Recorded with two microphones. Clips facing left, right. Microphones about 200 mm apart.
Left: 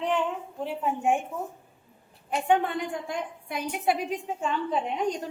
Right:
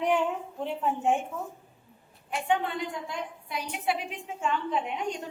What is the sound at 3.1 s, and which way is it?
A woman's voice, 50° left (ahead or behind).